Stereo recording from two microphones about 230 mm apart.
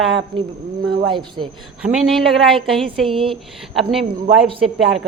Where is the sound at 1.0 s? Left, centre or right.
Right.